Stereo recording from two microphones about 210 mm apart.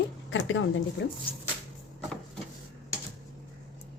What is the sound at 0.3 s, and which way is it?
Speech, 65° left (ahead or behind).